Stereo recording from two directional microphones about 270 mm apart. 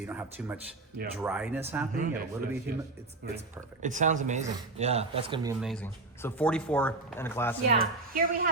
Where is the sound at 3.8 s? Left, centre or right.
Right.